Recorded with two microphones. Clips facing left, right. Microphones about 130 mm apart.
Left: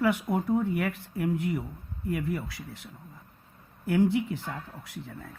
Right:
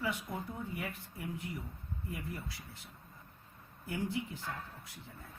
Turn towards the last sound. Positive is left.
turn(degrees=90)